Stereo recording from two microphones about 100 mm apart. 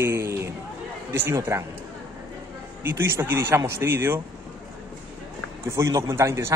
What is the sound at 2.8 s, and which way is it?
A man's voice, 25° right (ahead or behind).